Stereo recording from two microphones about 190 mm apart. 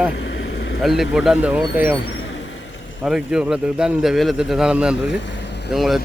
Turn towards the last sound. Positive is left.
turn(degrees=0)  # may be behind; listen again after turning